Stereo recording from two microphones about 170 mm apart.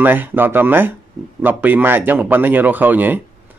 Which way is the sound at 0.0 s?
10° right (ahead or behind).